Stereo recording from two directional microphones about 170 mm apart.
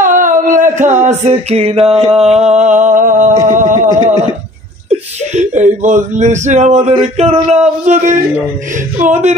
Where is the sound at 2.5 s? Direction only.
45° right (ahead or behind).